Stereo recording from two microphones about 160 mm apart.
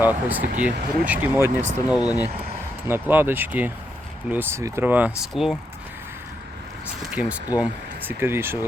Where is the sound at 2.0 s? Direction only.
25° left (ahead or behind).